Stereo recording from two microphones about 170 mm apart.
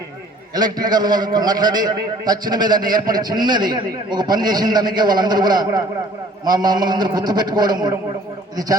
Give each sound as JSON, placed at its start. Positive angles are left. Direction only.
{"t": 0.5, "sound": "a man's voice", "side_deg": -25}